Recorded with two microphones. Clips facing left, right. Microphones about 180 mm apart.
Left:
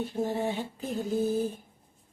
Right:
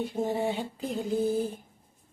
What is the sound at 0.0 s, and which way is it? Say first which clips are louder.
Speech: right 1 dB; 15° right (ahead or behind).